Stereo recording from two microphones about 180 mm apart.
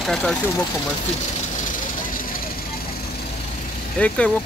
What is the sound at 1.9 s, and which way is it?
Vehicle, 50° left (ahead or behind).